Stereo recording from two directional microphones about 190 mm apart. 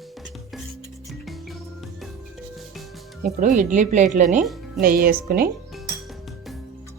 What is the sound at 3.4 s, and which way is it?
A woman's voice, 40° right (ahead or behind).